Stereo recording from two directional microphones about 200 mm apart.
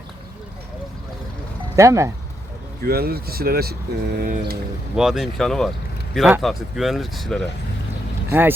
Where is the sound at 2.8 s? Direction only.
50° right (ahead or behind).